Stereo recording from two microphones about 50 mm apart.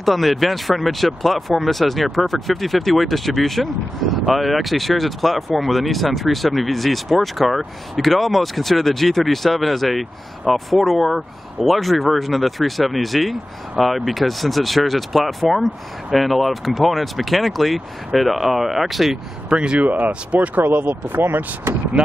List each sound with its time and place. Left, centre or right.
0.0 s speech: centre
19.5 s speech: centre
19.8 s speech: right
20.6 s speech: right